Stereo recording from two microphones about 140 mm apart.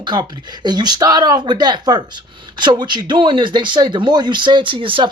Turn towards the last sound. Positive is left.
turn(degrees=-40)  # may be behind; listen again after turning